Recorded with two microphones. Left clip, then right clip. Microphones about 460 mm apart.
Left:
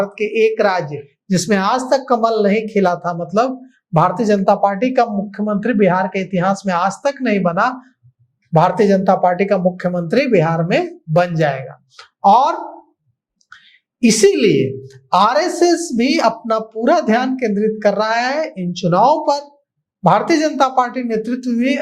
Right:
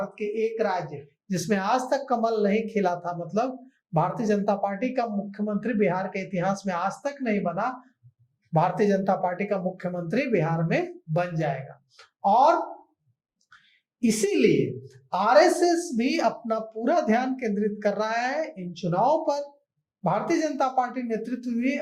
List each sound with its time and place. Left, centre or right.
0.0 s a woman's voice: left
14.0 s a woman's voice: left